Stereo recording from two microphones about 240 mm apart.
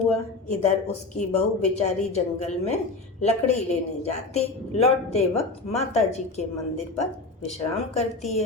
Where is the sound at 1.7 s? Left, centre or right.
Left.